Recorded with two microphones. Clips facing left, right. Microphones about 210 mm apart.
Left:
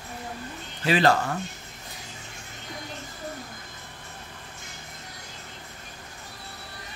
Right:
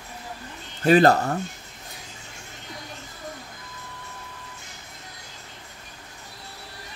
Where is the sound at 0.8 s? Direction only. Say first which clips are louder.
Right 5 dB; 45° right (ahead or behind).